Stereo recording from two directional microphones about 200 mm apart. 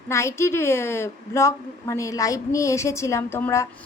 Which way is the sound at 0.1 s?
15° left (ahead or behind).